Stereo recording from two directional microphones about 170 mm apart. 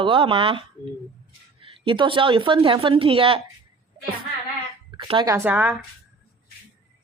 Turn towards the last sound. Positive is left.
turn(degrees=-10)  # may be behind; listen again after turning